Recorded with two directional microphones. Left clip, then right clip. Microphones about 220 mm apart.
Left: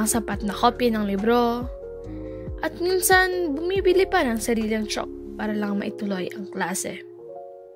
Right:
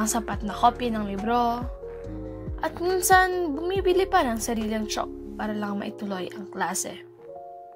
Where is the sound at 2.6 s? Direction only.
45° left (ahead or behind).